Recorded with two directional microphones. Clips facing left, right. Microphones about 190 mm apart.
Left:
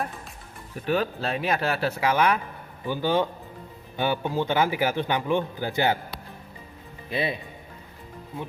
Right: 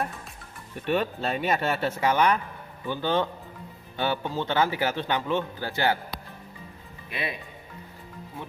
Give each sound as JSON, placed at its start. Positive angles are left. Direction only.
{"t": 0.8, "sound": "speech", "side_deg": 0}
{"t": 7.1, "sound": "speech", "side_deg": 30}